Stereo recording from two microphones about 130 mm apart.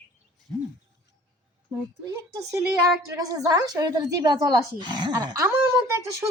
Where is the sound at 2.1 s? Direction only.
25° right (ahead or behind).